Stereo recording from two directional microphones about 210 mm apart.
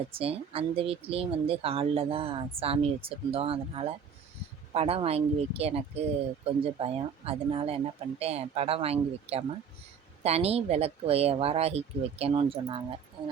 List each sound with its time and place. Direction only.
0.1 s speech: 25° right (ahead or behind)